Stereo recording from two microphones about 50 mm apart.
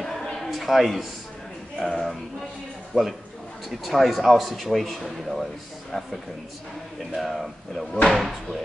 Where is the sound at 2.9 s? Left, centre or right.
Centre.